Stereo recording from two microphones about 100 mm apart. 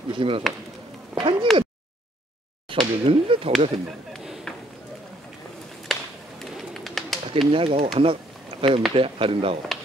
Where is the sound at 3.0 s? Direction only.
70° right (ahead or behind).